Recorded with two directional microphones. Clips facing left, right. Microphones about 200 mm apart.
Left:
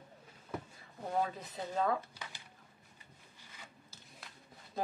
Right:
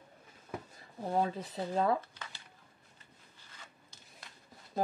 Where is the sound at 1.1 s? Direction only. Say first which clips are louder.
Right 3 dB; 30° right (ahead or behind).